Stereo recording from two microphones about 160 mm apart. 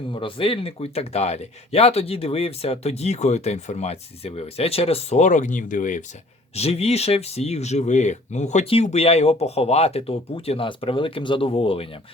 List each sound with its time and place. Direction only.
0.1 s speech: 35° left (ahead or behind); by 6.0 s 55° left (ahead or behind)
6.6 s speech: 40° left (ahead or behind)